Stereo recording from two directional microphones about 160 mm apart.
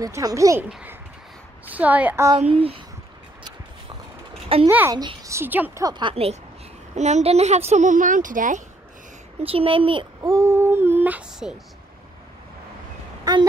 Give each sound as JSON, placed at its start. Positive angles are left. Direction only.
{"t": 0.0, "sound": "a woman's voice", "side_deg": -20}
{"t": 0.7, "sound": "a woman's voice", "side_deg": -5}
{"t": 2.5, "sound": "a child's voice", "side_deg": -35}
{"t": 4.6, "sound": "child singing", "side_deg": -15}
{"t": 4.9, "sound": "a woman's voice", "side_deg": -25}
{"t": 5.9, "sound": "a child's voice", "side_deg": -30}
{"t": 7.0, "sound": "a woman's voice", "side_deg": -45}
{"t": 9.4, "sound": "a child's voice", "side_deg": -35}
{"t": 10.2, "sound": "child singing", "side_deg": -20}
{"t": 13.2, "sound": "speech", "side_deg": -25}